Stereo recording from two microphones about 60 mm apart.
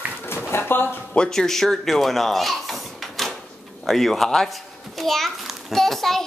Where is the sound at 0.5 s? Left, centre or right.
Left.